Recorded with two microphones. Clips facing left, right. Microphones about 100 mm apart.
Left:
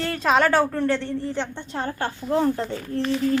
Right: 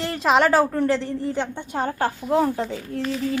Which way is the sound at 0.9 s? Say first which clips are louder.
Right 1 dB; 30° right (ahead or behind).